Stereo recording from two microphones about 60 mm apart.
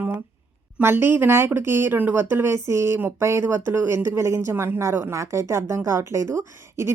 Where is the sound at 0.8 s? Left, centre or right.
Right.